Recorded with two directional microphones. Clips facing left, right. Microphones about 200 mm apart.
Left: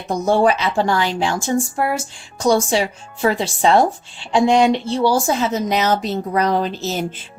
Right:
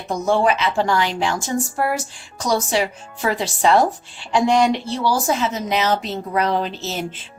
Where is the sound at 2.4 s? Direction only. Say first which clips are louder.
Left 4 dB; 30° left (ahead or behind).